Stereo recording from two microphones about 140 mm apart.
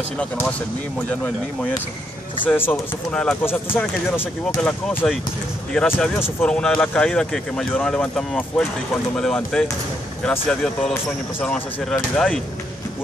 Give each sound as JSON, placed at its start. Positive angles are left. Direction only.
{"t": 0.2, "sound": "speech", "side_deg": 10}
{"t": 4.6, "sound": "speech", "side_deg": 5}